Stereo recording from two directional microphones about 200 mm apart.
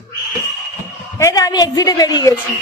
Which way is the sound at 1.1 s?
15° left (ahead or behind).